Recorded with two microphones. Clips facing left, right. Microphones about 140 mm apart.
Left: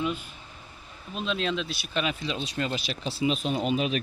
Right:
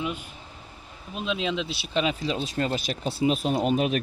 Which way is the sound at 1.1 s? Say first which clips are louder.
Right 1 dB; 15° right (ahead or behind).